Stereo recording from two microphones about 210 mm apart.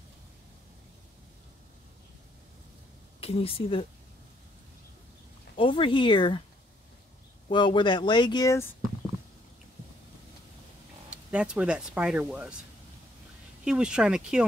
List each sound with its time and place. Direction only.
3.2 s speech: 30° left (ahead or behind)
5.6 s speech: 25° left (ahead or behind)
7.4 s speech: 20° left (ahead or behind)
11.1 s speech: 5° right (ahead or behind)
13.7 s speech: 5° right (ahead or behind)